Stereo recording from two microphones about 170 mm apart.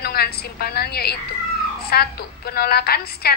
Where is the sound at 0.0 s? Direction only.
65° left (ahead or behind).